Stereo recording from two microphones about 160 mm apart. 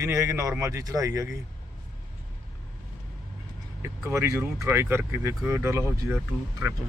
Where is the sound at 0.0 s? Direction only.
20° right (ahead or behind).